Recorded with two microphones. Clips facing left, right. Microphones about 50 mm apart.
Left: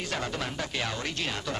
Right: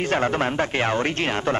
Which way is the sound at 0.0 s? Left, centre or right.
Right.